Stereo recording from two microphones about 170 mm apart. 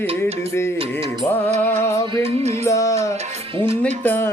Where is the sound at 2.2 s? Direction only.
40° right (ahead or behind).